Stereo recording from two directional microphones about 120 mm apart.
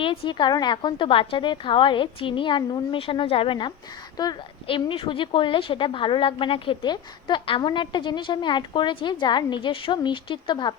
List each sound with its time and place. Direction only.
0.0 s a woman's voice: 45° left (ahead or behind)
4.2 s a woman's voice: 35° left (ahead or behind)
4.6 s a woman's voice: 50° left (ahead or behind)